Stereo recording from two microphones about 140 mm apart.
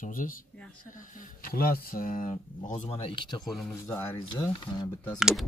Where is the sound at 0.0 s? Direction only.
75° left (ahead or behind).